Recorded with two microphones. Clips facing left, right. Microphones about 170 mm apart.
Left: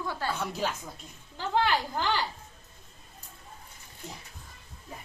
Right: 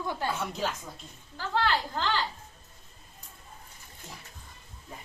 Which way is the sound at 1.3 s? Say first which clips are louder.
Left 1 dB; 15° left (ahead or behind).